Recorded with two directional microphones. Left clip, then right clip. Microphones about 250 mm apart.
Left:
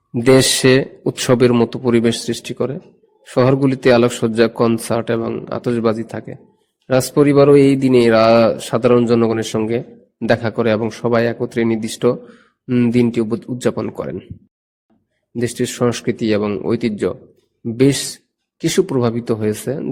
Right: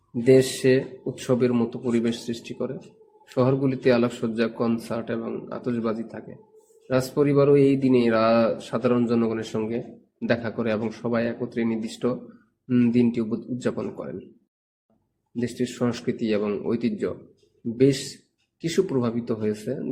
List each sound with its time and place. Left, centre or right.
0.3 s a man's voice: left
15.4 s a man's voice: left
18.6 s a man's voice: left